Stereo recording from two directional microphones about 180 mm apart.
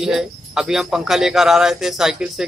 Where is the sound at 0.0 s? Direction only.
Centre (ahead or behind).